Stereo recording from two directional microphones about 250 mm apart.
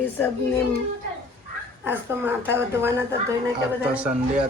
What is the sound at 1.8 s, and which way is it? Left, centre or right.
Speech, centre.